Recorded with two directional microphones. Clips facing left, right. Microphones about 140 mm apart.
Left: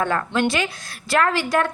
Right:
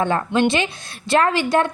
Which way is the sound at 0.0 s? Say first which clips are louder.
Right 3 dB; 20° right (ahead or behind).